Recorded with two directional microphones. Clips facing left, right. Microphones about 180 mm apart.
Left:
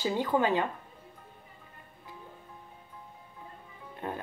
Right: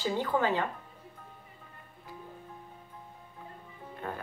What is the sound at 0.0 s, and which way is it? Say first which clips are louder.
Speech: left 2 dB; 15° left (ahead or behind).